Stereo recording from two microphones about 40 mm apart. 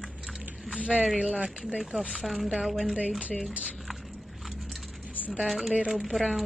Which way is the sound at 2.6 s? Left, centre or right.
Centre.